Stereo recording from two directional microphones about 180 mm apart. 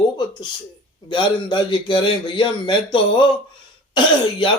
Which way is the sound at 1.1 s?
25° left (ahead or behind).